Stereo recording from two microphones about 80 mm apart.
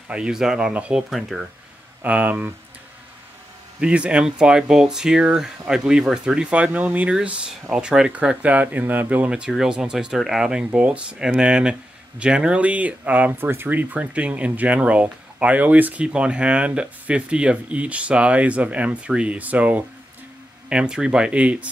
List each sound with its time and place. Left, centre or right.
0.1 s speech: centre
1.1 s speech: centre
2.0 s speech: centre
3.8 s speech: centre
9.3 s speech: centre